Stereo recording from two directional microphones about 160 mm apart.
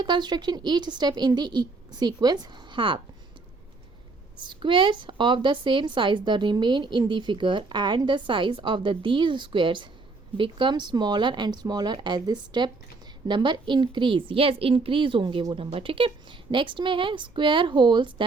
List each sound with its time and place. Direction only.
0.0 s a woman's voice: 25° right (ahead or behind)
4.4 s a woman's voice: 30° right (ahead or behind)